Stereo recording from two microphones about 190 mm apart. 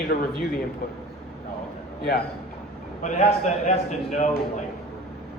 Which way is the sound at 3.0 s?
35° left (ahead or behind).